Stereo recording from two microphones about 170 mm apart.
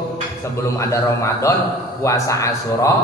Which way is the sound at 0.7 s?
15° left (ahead or behind).